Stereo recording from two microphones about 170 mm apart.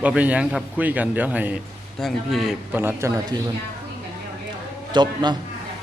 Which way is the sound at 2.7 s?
15° right (ahead or behind).